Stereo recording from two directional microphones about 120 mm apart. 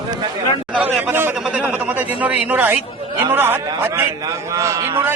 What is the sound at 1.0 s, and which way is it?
A man's voice, 20° right (ahead or behind).